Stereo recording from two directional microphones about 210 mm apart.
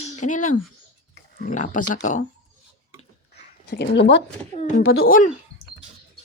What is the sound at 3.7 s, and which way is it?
Speech, 55° left (ahead or behind).